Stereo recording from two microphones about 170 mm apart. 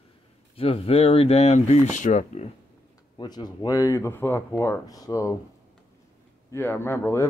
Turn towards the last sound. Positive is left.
turn(degrees=15)  # may be behind; listen again after turning